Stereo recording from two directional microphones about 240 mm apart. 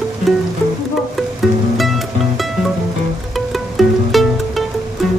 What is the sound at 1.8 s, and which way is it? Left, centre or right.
Music, centre.